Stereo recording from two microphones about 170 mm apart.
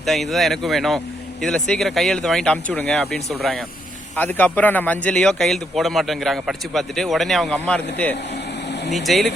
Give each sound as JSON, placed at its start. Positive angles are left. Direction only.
{"t": 0.0, "sound": "a man's voice", "side_deg": 0}